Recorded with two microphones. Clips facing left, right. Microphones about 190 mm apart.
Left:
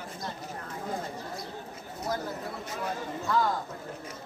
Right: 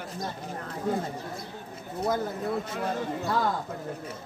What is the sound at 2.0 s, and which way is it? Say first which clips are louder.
Speech: right 5 dB; 55° right (ahead or behind).